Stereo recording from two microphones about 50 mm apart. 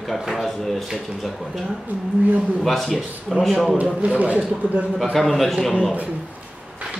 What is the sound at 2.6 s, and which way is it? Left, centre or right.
Speech, centre.